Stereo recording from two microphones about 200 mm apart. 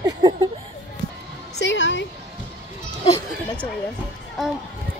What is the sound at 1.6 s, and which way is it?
Speech, 65° left (ahead or behind).